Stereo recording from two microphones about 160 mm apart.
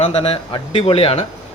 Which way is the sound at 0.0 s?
40° left (ahead or behind).